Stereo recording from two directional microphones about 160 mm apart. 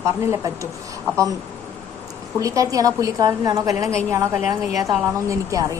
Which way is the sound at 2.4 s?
20° right (ahead or behind).